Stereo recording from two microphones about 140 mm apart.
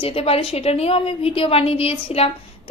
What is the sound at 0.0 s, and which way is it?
A woman's voice, 45° left (ahead or behind).